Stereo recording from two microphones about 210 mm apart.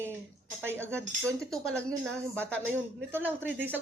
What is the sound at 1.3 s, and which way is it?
Speech, 5° left (ahead or behind).